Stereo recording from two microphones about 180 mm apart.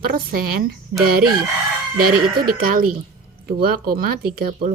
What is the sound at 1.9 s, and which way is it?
A woman's voice, 55° right (ahead or behind).